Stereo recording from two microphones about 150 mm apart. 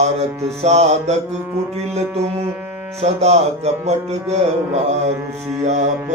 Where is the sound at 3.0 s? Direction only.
45° right (ahead or behind).